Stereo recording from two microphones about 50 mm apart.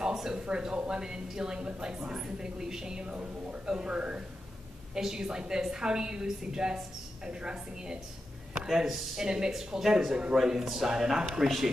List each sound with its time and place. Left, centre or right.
0.0 s speech: centre